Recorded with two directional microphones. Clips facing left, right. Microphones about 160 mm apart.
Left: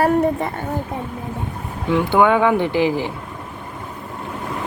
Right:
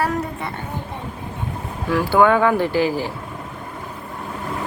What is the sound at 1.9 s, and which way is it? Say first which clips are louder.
Speech: even; 20° left (ahead or behind).